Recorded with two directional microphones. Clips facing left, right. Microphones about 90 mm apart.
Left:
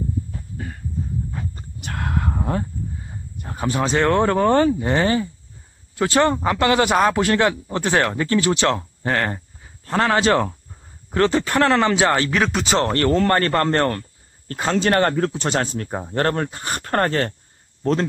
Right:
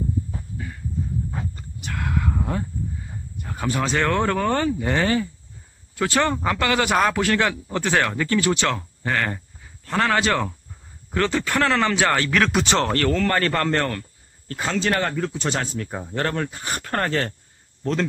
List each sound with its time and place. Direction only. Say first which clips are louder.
1.8 s a sound: left 1 dB; 45° left (ahead or behind)
3.4 s speech: left 2 dB; 25° left (ahead or behind)
12.4 s speech: right 1 dB; centre (ahead or behind)
12.9 s speech: left 3 dB; 30° left (ahead or behind)